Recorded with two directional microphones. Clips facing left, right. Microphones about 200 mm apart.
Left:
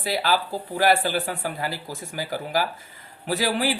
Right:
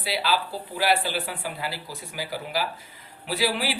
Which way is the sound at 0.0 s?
50° left (ahead or behind).